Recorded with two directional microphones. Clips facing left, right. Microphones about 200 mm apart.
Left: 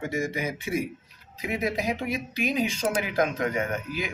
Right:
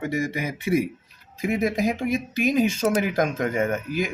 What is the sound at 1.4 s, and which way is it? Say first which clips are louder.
Speech: right 5 dB; 45° right (ahead or behind).